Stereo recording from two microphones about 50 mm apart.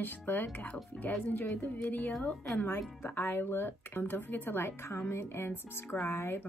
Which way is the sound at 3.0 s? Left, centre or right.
Left.